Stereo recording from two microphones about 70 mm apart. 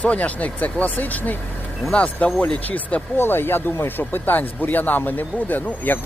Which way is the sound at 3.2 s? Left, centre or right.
Left.